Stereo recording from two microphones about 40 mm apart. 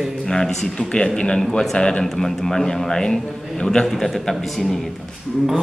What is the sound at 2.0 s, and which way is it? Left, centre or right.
Speech, centre.